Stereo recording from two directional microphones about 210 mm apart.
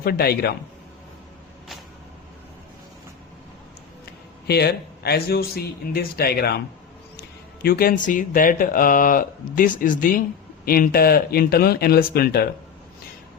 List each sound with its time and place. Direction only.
0.0 s a man's voice: 45° left (ahead or behind)
4.4 s a man's voice: 50° left (ahead or behind)